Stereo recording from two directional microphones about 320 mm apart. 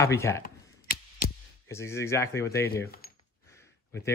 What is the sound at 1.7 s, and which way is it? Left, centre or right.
Speech, centre.